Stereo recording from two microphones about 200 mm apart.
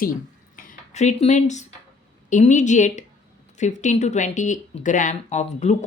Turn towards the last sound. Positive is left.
turn(degrees=35)  # may be behind; listen again after turning